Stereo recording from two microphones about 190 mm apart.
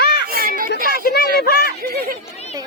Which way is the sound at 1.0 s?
55° left (ahead or behind).